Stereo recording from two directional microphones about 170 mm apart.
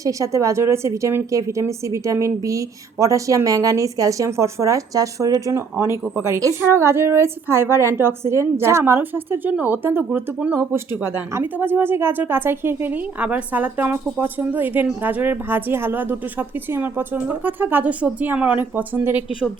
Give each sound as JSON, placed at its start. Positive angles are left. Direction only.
{"t": 0.0, "sound": "a woman's voice", "side_deg": -20}